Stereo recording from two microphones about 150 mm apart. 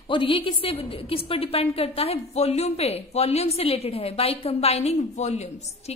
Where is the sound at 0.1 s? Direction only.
35° left (ahead or behind).